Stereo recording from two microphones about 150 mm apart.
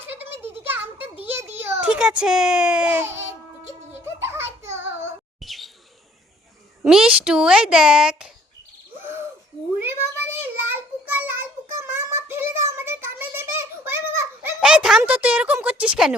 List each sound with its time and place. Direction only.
0.0 s a sound: 15° right (ahead or behind)
1.8 s a child's voice: 5° right (ahead or behind)
3.7 s music: 15° right (ahead or behind)
4.6 s child singing: 15° right (ahead or behind)
5.4 s bird: centre (ahead or behind)
6.8 s a woman's voice: 5° right (ahead or behind)
9.0 s a sound: 15° right (ahead or behind)
9.8 s child singing: 15° right (ahead or behind)
12.3 s a sound: 15° right (ahead or behind)
14.6 s speech: 5° right (ahead or behind)